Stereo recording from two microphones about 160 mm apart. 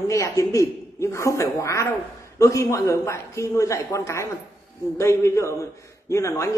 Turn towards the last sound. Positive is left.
turn(degrees=20)  # may be behind; listen again after turning